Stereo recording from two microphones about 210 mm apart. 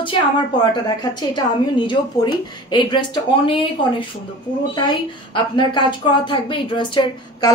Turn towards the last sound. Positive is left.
turn(degrees=25)  # may be behind; listen again after turning